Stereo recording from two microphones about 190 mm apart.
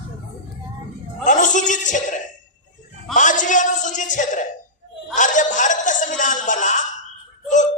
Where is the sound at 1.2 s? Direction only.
40° left (ahead or behind).